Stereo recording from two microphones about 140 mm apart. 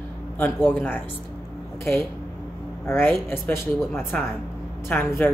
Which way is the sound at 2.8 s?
15° left (ahead or behind).